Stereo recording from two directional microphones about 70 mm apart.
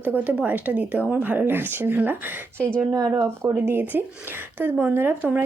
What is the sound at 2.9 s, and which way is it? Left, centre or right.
Speech, right.